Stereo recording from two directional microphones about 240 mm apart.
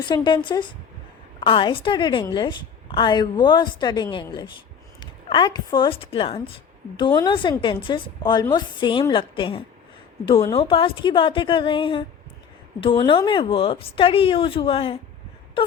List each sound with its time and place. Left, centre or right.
0.0 s a woman's voice: centre